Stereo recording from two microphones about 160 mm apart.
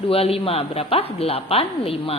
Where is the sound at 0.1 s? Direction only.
35° left (ahead or behind).